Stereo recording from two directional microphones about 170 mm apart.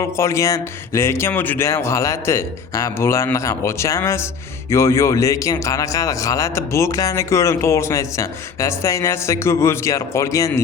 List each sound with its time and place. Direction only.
0.0 s a man's voice: 15° left (ahead or behind)